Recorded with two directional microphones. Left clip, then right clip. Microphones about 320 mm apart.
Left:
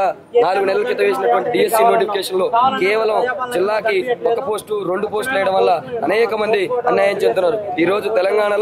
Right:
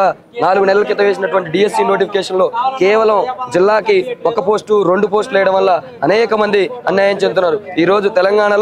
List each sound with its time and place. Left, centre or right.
0.0 s a man's voice: right